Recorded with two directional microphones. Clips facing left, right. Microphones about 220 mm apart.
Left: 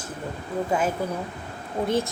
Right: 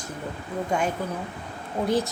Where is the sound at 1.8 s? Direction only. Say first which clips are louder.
Right 1 dB; centre (ahead or behind).